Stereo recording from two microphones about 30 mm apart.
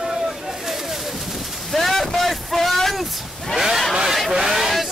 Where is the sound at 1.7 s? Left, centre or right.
Centre.